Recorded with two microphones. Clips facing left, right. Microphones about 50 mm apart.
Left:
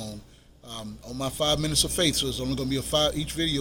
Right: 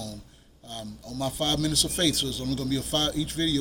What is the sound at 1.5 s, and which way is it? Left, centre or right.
Speech, centre.